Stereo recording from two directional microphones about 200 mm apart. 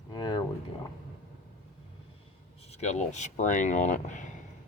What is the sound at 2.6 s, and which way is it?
Speech, 35° left (ahead or behind).